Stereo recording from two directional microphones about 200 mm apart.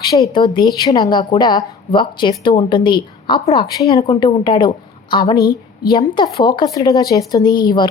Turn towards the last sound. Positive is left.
turn(degrees=20)  # may be behind; listen again after turning